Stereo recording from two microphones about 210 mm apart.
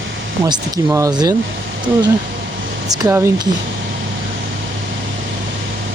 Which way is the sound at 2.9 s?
15° right (ahead or behind).